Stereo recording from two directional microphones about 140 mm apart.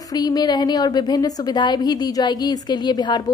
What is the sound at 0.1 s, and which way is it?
A woman's voice, 30° left (ahead or behind).